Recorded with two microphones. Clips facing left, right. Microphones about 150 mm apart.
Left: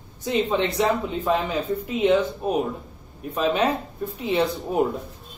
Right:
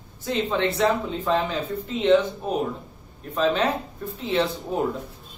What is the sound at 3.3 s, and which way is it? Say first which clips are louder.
Speech: even; 15° left (ahead or behind).